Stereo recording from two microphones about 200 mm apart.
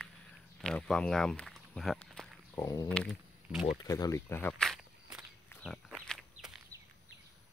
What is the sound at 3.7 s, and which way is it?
Walk, 20° left (ahead or behind).